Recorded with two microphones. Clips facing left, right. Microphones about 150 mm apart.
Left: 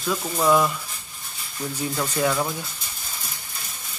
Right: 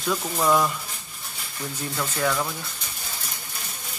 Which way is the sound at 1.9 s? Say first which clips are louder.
Left 2 dB; 15° left (ahead or behind).